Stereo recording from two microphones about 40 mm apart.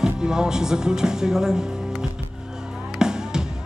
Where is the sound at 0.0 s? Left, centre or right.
Centre.